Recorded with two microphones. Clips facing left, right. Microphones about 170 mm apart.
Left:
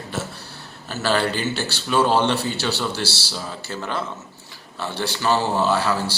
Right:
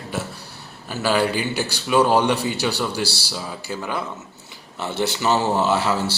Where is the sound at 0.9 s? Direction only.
10° right (ahead or behind).